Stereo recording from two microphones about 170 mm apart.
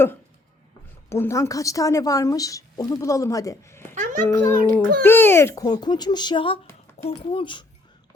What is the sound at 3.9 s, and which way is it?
Speech, 50° right (ahead or behind).